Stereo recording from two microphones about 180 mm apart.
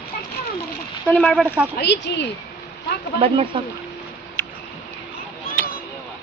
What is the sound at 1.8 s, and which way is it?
Speech, 70° left (ahead or behind).